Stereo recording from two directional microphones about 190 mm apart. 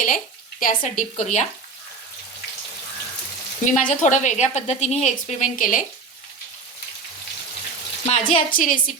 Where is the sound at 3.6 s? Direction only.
40° left (ahead or behind).